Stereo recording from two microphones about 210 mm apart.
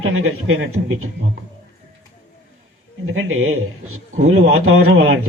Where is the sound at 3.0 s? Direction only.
70° right (ahead or behind).